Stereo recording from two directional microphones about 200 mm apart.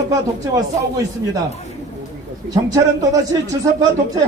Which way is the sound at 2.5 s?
15° right (ahead or behind).